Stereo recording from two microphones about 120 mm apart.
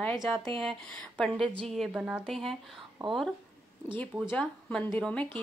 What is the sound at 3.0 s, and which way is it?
Speech, 45° right (ahead or behind).